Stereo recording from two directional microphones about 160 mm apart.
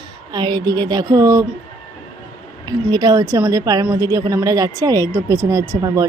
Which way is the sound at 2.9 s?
25° right (ahead or behind).